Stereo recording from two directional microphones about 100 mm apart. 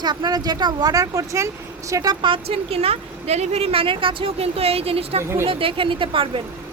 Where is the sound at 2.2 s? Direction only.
65° right (ahead or behind).